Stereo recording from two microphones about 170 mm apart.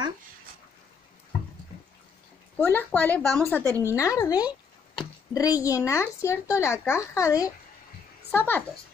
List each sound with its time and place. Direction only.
2.6 s a woman's voice: 10° left (ahead or behind)